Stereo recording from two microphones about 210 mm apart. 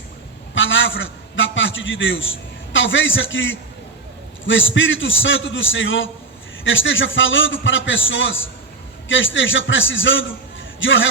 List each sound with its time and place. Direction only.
0.5 s a man's voice: 65° left (ahead or behind)